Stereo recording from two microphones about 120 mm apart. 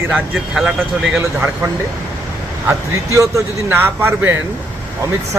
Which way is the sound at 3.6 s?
15° right (ahead or behind).